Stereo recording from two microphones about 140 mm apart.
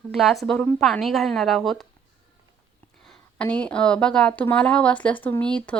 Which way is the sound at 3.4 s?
10° left (ahead or behind).